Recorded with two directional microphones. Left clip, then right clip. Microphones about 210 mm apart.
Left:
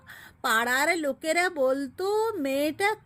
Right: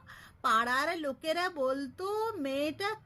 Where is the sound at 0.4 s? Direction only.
15° left (ahead or behind).